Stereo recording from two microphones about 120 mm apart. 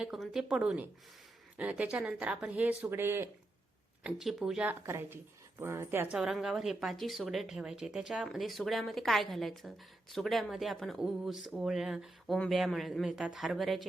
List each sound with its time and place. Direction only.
0.0 s speech: 5° right (ahead or behind); by 3.2 s 20° right (ahead or behind)
4.0 s speech: centre (ahead or behind)
4.6 s a woman's voice: 15° right (ahead or behind)
6.1 s speech: 5° right (ahead or behind)